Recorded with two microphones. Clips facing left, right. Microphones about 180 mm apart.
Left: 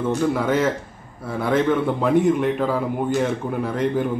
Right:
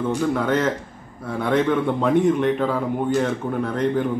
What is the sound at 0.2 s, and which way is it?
A man's voice, 5° left (ahead or behind).